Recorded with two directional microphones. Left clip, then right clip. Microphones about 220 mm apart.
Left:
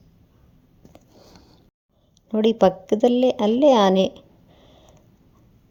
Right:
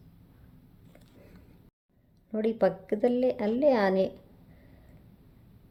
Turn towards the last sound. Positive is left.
turn(degrees=30)  # may be behind; listen again after turning